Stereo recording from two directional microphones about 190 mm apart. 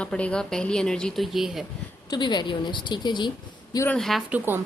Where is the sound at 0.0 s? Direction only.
5° left (ahead or behind).